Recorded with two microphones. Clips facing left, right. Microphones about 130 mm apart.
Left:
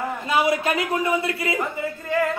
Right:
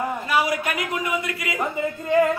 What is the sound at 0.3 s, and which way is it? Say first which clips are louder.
A man's voice: left 4 dB; 25° left (ahead or behind).